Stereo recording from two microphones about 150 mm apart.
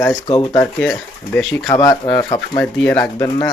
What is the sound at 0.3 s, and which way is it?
Speech, 30° left (ahead or behind).